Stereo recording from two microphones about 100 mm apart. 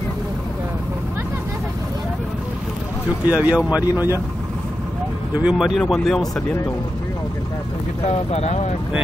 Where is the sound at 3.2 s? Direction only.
10° right (ahead or behind).